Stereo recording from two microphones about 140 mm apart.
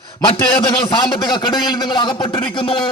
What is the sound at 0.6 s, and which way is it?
A man's voice, 35° left (ahead or behind).